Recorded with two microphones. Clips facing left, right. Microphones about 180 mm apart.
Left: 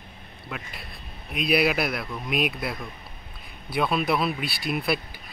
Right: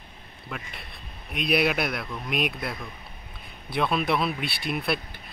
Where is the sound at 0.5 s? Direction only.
Centre (ahead or behind).